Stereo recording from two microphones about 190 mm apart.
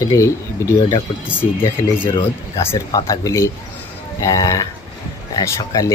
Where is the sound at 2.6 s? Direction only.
15° left (ahead or behind).